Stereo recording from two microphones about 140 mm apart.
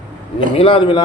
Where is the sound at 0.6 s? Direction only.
40° left (ahead or behind).